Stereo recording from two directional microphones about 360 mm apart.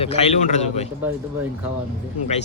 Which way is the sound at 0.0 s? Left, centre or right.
Centre.